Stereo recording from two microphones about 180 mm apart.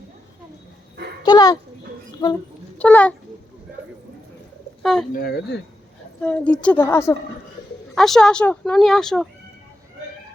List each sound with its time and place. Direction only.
1.2 s speech: 20° left (ahead or behind)
2.7 s a child's voice: 10° left (ahead or behind)
4.8 s speech: centre (ahead or behind)
5.1 s speech: 60° left (ahead or behind)
6.2 s a woman's voice: 5° left (ahead or behind)
7.9 s speech: centre (ahead or behind)